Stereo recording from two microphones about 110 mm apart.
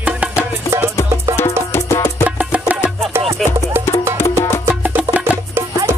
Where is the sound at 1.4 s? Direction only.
25° left (ahead or behind).